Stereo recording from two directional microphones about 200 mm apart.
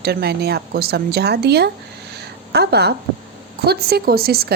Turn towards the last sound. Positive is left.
turn(degrees=-50)  # may be behind; listen again after turning